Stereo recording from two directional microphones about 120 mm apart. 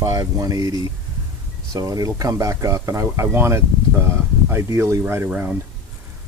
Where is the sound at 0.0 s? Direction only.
30° right (ahead or behind).